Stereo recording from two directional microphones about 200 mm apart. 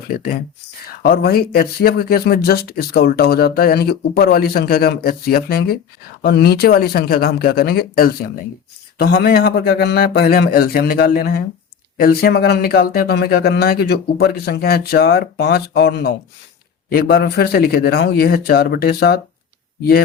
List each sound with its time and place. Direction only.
1.0 s speech: 50° left (ahead or behind)